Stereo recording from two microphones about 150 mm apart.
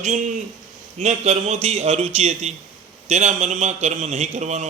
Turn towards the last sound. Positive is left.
turn(degrees=-50)  # may be behind; listen again after turning